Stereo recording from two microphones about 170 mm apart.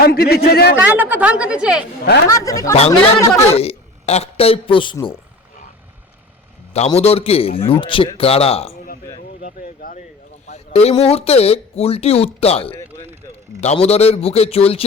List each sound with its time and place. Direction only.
0.0 s a man's voice: 60° left (ahead or behind)
0.8 s speech: 10° right (ahead or behind)
2.2 s speech: 20° left (ahead or behind)
3.5 s a man's voice: 35° left (ahead or behind)
6.7 s speech: 35° left (ahead or behind)
9.4 s speech: 55° left (ahead or behind)
10.4 s speech: 40° left (ahead or behind)